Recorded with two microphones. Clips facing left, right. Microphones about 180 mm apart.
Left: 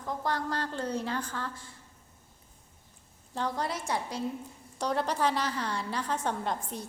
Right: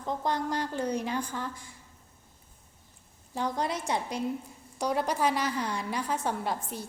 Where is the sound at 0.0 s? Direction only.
20° right (ahead or behind).